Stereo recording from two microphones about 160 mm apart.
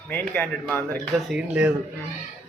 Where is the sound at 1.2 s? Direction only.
5° right (ahead or behind).